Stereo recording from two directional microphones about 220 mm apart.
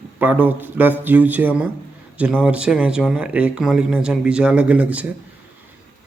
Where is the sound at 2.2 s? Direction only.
5° right (ahead or behind).